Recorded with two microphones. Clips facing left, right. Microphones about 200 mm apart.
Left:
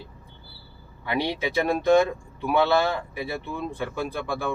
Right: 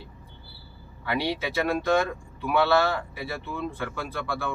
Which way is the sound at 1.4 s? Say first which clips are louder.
Left 2 dB; 15° left (ahead or behind).